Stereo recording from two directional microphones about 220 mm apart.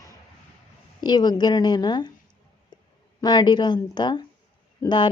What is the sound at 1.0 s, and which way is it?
Speech, 20° left (ahead or behind).